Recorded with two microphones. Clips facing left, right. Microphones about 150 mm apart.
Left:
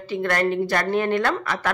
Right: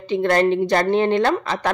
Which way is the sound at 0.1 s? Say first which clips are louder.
Right 5 dB; 25° right (ahead or behind).